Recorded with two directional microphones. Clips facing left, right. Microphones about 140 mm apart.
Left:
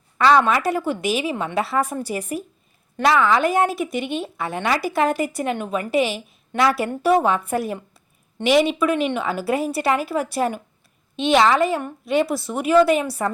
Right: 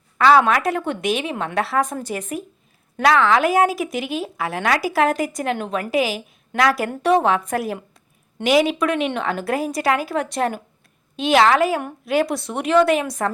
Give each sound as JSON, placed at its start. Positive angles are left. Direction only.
{"t": 0.2, "sound": "a woman's voice", "side_deg": 0}